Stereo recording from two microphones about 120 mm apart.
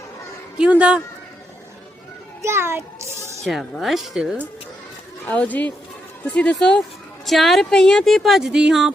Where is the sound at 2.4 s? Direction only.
20° right (ahead or behind).